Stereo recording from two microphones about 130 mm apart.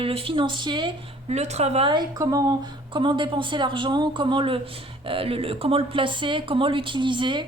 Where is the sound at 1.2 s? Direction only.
55° right (ahead or behind).